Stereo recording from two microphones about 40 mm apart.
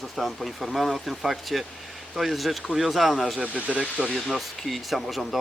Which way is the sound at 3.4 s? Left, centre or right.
Right.